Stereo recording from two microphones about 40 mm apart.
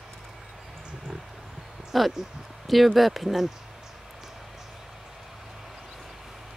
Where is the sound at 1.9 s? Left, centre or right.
Centre.